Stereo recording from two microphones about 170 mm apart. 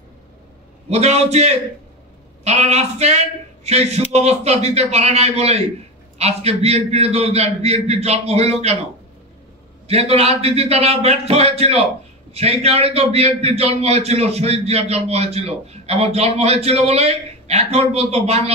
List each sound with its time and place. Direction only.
0.8 s a man's voice: 40° right (ahead or behind)
9.8 s a man's voice: 35° right (ahead or behind)